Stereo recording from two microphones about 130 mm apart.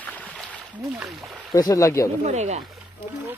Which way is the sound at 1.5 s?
25° left (ahead or behind).